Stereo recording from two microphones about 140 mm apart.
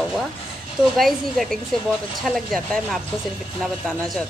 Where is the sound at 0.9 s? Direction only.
Centre (ahead or behind).